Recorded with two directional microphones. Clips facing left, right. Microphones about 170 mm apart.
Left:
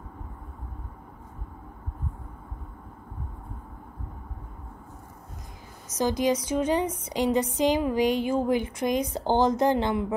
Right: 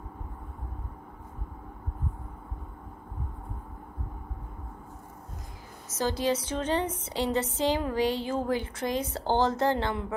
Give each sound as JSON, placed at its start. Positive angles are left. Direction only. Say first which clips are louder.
{"t": 5.9, "sound": "a woman's voice", "louder": "left 3 dB", "side_deg": 15}